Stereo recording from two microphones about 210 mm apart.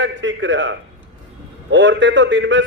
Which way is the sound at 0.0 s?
60° right (ahead or behind).